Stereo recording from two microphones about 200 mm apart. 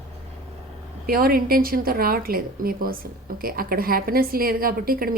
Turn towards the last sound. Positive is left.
turn(degrees=-50)  # may be behind; listen again after turning